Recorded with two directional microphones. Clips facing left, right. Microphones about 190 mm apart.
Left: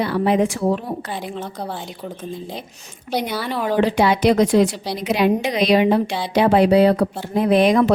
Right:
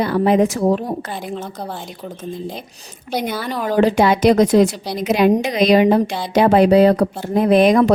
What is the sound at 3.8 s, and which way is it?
A woman's voice, 45° right (ahead or behind).